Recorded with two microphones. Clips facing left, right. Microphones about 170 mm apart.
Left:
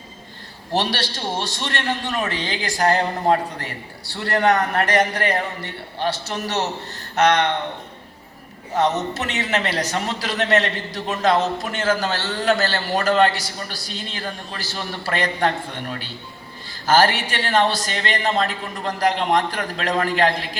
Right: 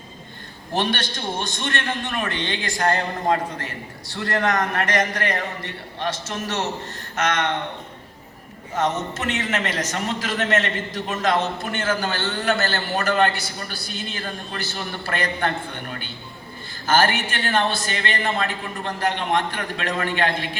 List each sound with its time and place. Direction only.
0.7 s a man's voice: 35° left (ahead or behind)
8.7 s a man's voice: 35° left (ahead or behind)
12.4 s a man's voice: 35° left (ahead or behind)